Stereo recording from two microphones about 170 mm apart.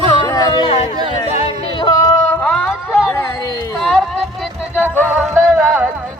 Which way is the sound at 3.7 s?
5° left (ahead or behind).